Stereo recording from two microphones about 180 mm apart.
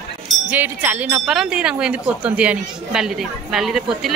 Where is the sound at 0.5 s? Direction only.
10° right (ahead or behind).